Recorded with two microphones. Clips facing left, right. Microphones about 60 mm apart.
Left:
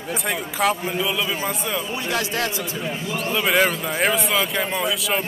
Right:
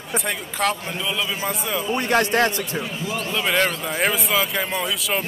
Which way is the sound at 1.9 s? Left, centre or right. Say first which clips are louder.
Right 9 dB; right.